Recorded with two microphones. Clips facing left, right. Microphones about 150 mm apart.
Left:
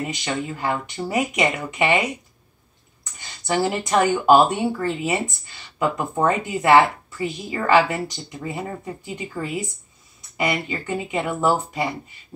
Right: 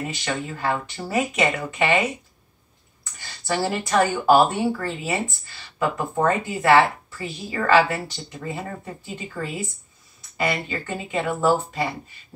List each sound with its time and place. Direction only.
0.1 s speech: 15° left (ahead or behind)